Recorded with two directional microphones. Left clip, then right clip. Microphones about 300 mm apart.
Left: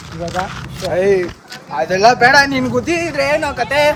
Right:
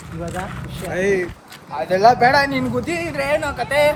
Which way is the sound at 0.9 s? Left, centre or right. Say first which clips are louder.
Left 6 dB; centre.